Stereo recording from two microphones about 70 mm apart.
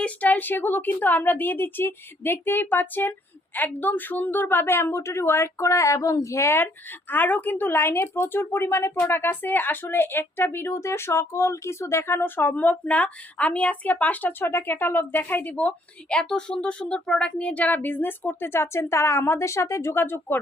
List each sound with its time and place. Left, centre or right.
0.0 s a woman's voice: left
7.1 s speech: left